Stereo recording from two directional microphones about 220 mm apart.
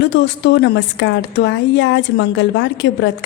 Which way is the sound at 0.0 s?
55° left (ahead or behind).